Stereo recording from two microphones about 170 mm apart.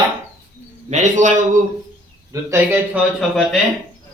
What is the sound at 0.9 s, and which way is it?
Speech, 45° right (ahead or behind).